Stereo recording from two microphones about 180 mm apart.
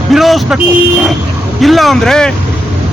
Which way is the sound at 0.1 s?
Centre (ahead or behind).